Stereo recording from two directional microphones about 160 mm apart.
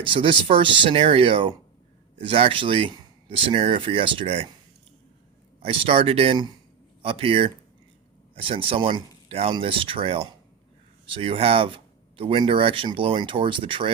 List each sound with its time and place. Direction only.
0.0 s speech: 35° right (ahead or behind)
5.6 s speech: 35° right (ahead or behind)